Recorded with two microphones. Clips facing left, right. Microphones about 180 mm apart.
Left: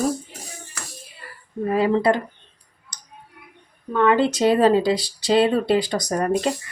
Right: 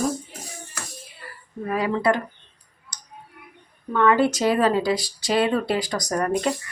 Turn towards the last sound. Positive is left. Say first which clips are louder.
# left 2 dB
turn(degrees=25)  # may be behind; listen again after turning